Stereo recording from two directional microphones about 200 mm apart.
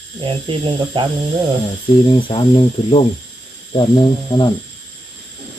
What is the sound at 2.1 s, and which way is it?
Speech, 25° left (ahead or behind).